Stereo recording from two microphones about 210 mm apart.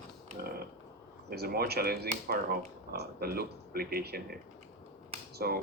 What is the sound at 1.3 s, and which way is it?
Speech, 50° right (ahead or behind).